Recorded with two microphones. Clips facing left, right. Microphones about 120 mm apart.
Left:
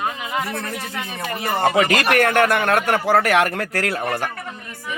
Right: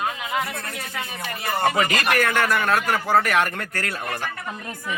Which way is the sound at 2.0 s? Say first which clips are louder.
Left 5 dB; 60° left (ahead or behind).